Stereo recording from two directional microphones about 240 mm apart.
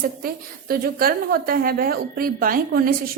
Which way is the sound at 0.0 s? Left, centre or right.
Right.